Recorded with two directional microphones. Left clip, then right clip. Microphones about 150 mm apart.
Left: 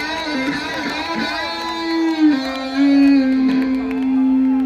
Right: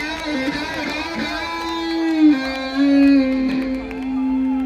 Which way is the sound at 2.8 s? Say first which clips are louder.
Left 1 dB; 35° left (ahead or behind).